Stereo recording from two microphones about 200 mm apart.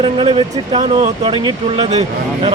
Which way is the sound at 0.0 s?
25° right (ahead or behind).